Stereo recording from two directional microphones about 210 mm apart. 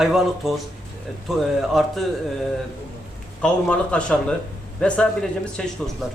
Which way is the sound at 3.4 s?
5° left (ahead or behind).